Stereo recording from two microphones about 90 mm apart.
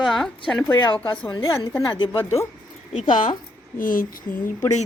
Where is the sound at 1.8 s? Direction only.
55° left (ahead or behind).